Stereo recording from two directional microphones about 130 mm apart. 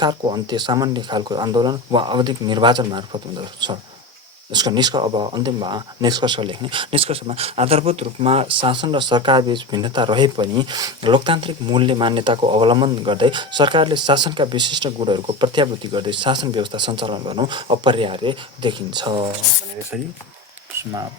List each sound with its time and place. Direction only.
0.0 s speech: 35° right (ahead or behind)